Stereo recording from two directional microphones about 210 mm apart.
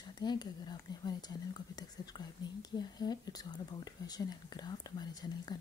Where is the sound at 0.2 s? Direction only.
20° left (ahead or behind).